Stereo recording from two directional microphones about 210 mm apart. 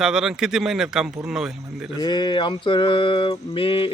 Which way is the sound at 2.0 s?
20° left (ahead or behind).